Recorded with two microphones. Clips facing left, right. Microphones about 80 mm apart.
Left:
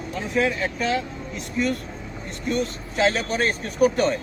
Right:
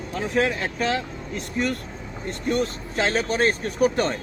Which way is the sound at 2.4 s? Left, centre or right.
Right.